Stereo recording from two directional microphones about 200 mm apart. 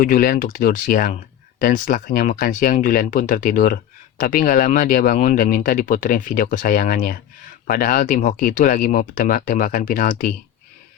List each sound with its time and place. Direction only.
0.0 s speech: 45° left (ahead or behind)